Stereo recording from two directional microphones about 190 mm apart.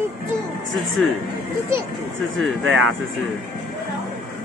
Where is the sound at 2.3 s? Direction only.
85° right.